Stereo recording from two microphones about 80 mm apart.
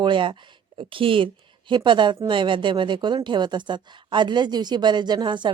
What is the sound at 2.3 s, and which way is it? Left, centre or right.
Speech, right.